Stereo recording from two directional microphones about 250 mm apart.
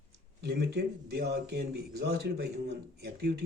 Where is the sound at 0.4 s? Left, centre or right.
Right.